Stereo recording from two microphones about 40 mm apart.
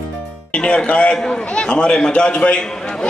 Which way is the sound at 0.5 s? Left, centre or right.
Left.